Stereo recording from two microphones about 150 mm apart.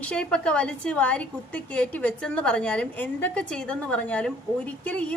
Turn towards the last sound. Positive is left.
turn(degrees=10)  # may be behind; listen again after turning